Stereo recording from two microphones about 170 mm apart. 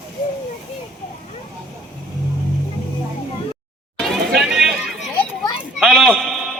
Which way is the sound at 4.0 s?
Centre (ahead or behind).